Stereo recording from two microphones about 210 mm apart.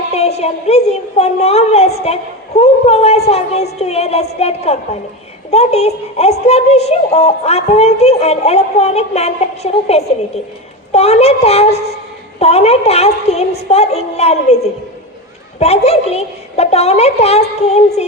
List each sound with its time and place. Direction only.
0.1 s a woman's voice: 30° left (ahead or behind)